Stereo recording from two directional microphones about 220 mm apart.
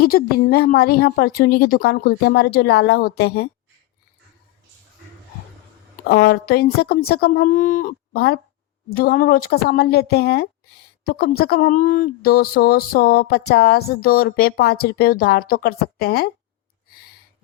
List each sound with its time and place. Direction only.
0.0 s speech: 45° left (ahead or behind)
6.1 s speech: 45° left (ahead or behind)